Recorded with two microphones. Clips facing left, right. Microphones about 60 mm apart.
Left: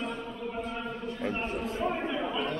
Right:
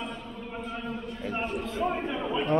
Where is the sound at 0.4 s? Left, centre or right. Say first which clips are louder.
Even; centre.